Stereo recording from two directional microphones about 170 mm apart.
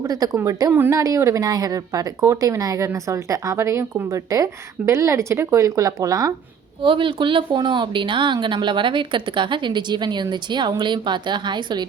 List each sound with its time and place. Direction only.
0.0 s speech: 20° right (ahead or behind)